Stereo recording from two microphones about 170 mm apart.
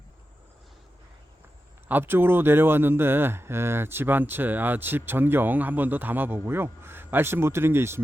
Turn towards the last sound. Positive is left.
turn(degrees=-15)  # may be behind; listen again after turning